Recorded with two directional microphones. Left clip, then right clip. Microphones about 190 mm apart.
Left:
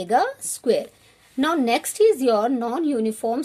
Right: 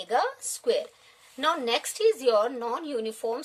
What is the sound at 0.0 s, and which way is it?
Speech, 30° left (ahead or behind).